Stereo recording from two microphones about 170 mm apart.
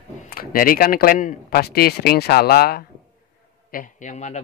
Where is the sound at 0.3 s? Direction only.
60° left (ahead or behind).